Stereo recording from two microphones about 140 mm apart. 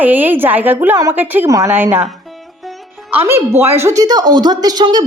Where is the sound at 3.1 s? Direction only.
15° right (ahead or behind).